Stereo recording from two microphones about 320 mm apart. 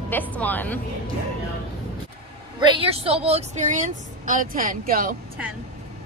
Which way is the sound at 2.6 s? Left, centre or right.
Centre.